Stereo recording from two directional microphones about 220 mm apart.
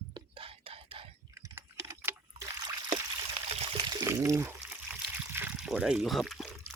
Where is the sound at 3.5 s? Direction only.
25° right (ahead or behind).